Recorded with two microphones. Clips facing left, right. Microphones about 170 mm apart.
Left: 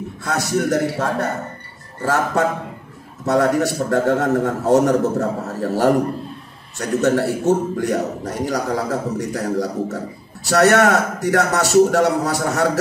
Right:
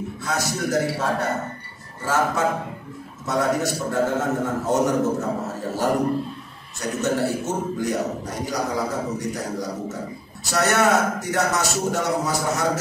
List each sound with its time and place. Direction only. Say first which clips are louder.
0.2 s a man's voice: left 6 dB; 65° left (ahead or behind)
6.8 s a man's voice: left 5 dB; 65° left (ahead or behind)